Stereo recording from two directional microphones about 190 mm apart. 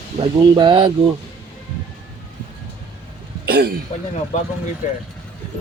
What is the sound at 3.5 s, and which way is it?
Cough, 55° right (ahead or behind).